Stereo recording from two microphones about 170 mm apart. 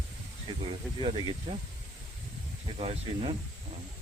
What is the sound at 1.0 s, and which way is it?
Speech, 30° right (ahead or behind).